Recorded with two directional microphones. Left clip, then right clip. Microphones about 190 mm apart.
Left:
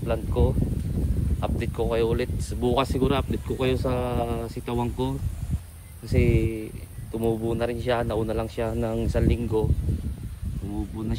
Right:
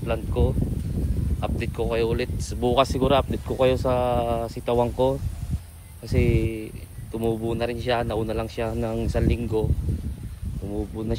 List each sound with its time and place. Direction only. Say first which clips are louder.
0.0 s speech: even; 20° left (ahead or behind)
0.5 s a sound: even; centre (ahead or behind)
1.6 s speech: even; 15° left (ahead or behind)